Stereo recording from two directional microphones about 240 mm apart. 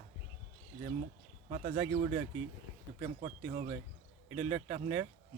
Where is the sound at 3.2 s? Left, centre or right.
Right.